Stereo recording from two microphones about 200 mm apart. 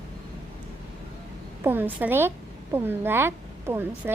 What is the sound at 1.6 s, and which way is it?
A woman's voice, 10° right (ahead or behind).